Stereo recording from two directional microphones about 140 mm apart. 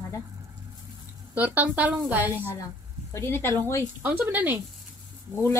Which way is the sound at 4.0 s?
15° right (ahead or behind).